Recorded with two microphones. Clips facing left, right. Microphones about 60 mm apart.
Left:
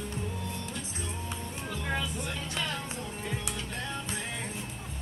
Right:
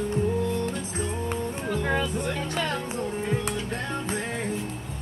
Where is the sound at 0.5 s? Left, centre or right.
Right.